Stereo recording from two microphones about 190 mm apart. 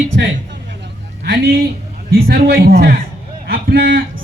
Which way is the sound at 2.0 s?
50° right (ahead or behind).